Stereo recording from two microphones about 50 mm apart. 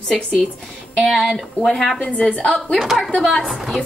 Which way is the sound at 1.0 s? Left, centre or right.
Centre.